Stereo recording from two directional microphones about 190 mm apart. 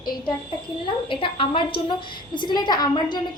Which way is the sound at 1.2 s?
25° left (ahead or behind).